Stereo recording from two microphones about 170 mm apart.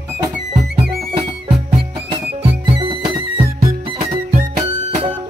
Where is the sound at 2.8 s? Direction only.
30° right (ahead or behind).